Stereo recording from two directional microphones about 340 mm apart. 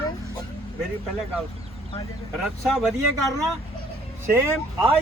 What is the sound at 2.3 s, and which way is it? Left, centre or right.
Speech, centre.